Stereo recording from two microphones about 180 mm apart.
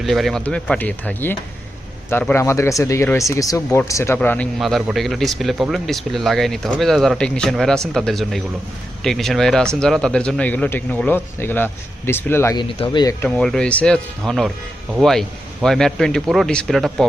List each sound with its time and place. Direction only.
0.0 s a man's voice: centre (ahead or behind)
4.5 s a man's voice: centre (ahead or behind)
12.5 s speech: 30° left (ahead or behind)
13.2 s speech: 5° left (ahead or behind)